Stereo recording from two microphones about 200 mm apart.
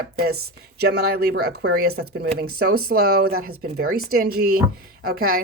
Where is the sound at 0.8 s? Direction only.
55° right (ahead or behind).